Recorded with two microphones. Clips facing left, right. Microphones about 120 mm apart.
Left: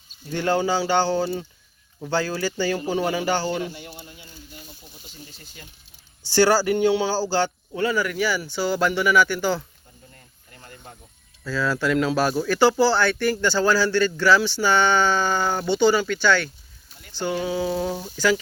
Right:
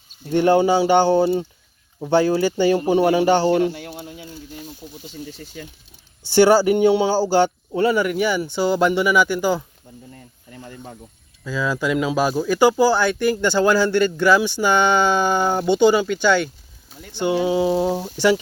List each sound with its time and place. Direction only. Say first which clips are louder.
0.3 s speech: right 7 dB; 20° right (ahead or behind)
3.5 s speech: right 9 dB; 70° right (ahead or behind); by 4.7 s 90° right
6.3 s speech: right 5 dB; 20° right (ahead or behind)
11.4 s speech: right 1 dB; 15° right (ahead or behind)